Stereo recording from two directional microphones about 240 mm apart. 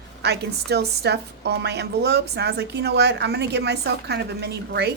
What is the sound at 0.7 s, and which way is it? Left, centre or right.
A woman's voice, right.